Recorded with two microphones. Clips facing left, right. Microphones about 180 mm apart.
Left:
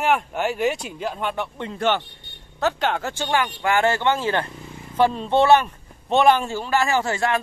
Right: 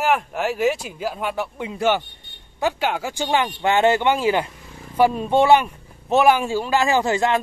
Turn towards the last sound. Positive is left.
turn(degrees=-20)  # may be behind; listen again after turning